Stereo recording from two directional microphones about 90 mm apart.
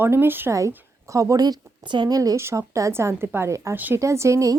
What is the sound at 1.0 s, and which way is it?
Speech, 35° right (ahead or behind).